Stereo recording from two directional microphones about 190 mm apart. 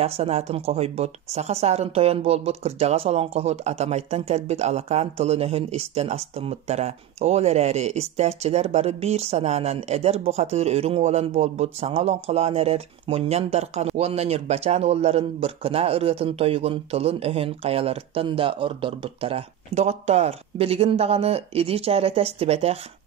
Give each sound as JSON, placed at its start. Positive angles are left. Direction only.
{"t": 0.0, "sound": "speech", "side_deg": -35}